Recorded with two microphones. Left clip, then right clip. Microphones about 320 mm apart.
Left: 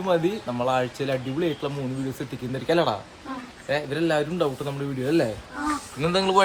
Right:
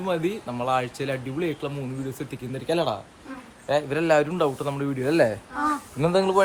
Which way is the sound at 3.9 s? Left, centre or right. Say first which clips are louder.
Right 3 dB; centre.